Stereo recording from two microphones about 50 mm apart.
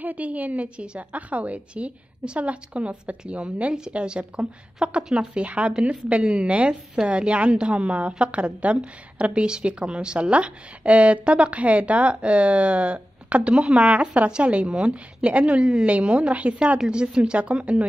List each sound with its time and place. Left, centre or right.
0.0 s a woman's voice: right